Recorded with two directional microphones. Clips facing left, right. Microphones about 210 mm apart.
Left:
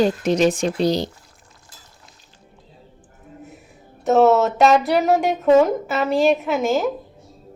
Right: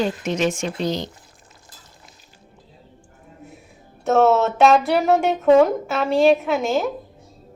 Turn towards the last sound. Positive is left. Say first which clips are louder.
# left 1 dB
turn(degrees=0)  # may be behind; listen again after turning